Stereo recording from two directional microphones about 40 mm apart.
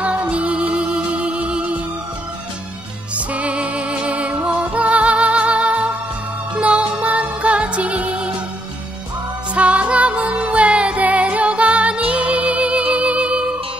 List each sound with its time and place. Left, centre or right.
0.0 s music: right
3.2 s music: right
9.6 s music: right